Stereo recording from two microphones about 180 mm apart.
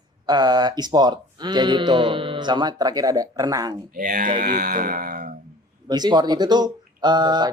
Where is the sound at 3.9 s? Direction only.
50° right (ahead or behind).